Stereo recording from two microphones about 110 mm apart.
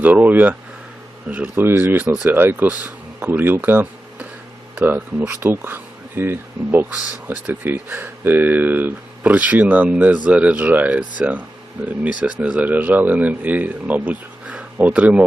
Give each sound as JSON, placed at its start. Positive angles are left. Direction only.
{"t": 0.0, "sound": "speech", "side_deg": -15}